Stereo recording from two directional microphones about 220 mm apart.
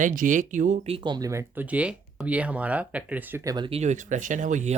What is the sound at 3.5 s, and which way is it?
Speech, 25° right (ahead or behind).